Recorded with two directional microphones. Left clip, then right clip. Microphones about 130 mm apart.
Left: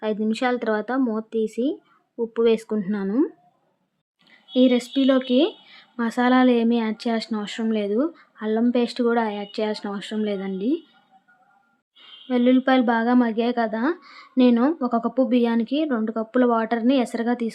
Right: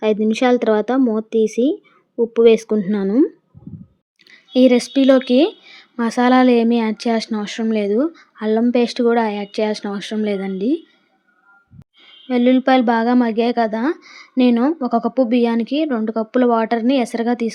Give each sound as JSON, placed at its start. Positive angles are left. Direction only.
{"t": 0.0, "sound": "a woman's voice", "side_deg": -25}
{"t": 4.3, "sound": "a woman's voice", "side_deg": -40}
{"t": 12.3, "sound": "a woman's voice", "side_deg": -30}